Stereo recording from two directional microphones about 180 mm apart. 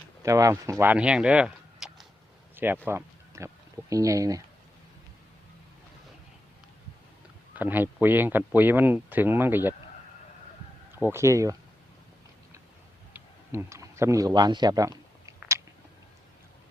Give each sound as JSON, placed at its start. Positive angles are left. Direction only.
{"t": 0.2, "sound": "speech", "side_deg": -20}
{"t": 2.8, "sound": "speech", "side_deg": -15}
{"t": 7.5, "sound": "speech", "side_deg": -10}
{"t": 11.0, "sound": "speech", "side_deg": -15}
{"t": 13.1, "sound": "tick-tock", "side_deg": -15}